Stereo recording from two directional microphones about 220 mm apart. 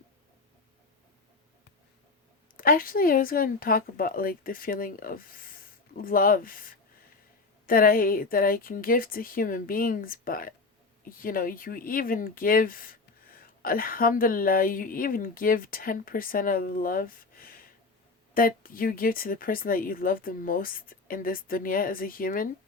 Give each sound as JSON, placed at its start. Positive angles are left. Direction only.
{"t": 2.6, "sound": "speech", "side_deg": 40}